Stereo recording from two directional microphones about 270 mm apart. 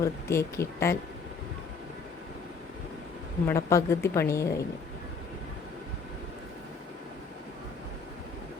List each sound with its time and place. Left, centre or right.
0.0 s a woman's voice: centre
3.4 s a woman's voice: centre